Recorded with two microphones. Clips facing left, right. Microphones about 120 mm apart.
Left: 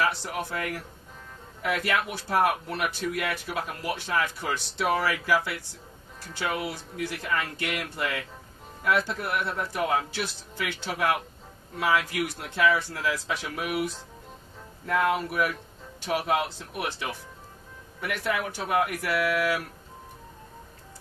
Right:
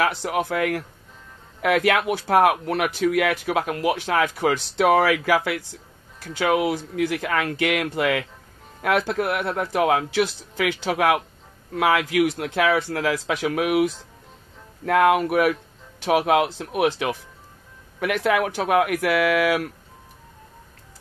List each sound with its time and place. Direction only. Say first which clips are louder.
0.0 s speech: right 5 dB; 75° right (ahead or behind)
14.9 s speech: right 8 dB; 75° right (ahead or behind)
16.0 s speech: right 8 dB; 85° right